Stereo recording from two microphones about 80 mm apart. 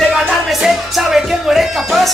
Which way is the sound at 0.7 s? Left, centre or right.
Centre.